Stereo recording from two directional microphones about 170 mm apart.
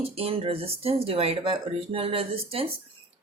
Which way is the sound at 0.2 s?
35° right (ahead or behind).